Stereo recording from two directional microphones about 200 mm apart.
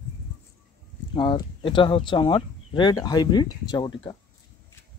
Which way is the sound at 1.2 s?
25° left (ahead or behind).